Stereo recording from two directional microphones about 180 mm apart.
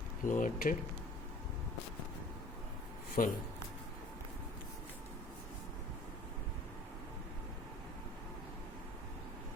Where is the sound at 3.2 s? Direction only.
50° left (ahead or behind).